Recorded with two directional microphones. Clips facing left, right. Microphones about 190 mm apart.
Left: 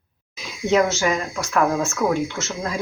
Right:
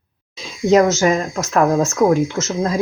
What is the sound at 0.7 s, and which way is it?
Speech, 40° right (ahead or behind).